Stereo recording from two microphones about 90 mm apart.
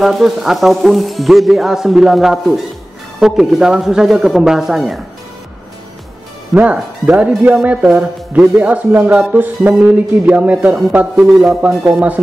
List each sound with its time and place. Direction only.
0.0 s speech: centre (ahead or behind)
6.5 s speech: 15° right (ahead or behind)